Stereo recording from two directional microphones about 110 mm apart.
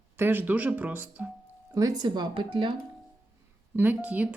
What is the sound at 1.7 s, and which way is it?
Speech, 35° right (ahead or behind).